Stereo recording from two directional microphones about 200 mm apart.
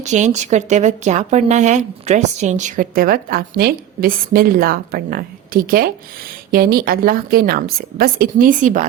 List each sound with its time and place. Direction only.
0.0 s a woman's voice: 35° right (ahead or behind)